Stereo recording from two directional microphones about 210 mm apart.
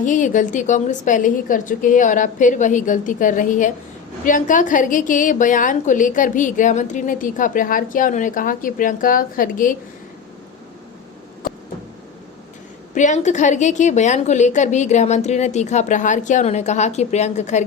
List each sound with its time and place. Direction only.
0.0 s a woman's voice: 35° left (ahead or behind)
12.9 s a woman's voice: 35° left (ahead or behind)